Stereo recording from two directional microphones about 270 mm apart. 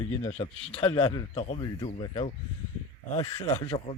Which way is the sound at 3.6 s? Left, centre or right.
Left.